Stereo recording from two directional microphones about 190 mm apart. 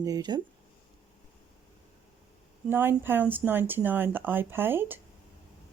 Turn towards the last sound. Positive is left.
turn(degrees=-10)  # may be behind; listen again after turning